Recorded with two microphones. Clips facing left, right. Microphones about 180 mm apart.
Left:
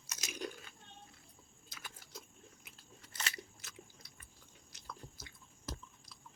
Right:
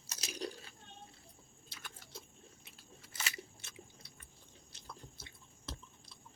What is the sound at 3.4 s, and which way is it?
Biting, 30° right (ahead or behind).